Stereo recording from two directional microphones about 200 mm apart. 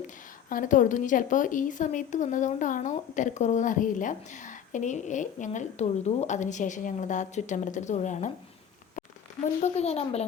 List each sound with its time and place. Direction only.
0.5 s a woman's voice: 40° left (ahead or behind)
9.6 s a woman's voice: 35° left (ahead or behind)